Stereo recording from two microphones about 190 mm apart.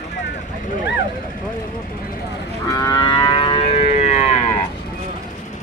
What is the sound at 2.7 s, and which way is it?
Livestock, 20° left (ahead or behind).